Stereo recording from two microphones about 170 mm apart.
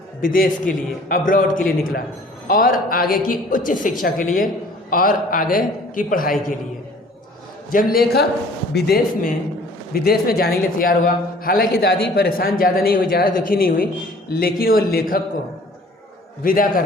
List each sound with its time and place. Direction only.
0.2 s a man's voice: 55° left (ahead or behind)
7.7 s a man's voice: 60° left (ahead or behind)
16.4 s a man's voice: 55° left (ahead or behind)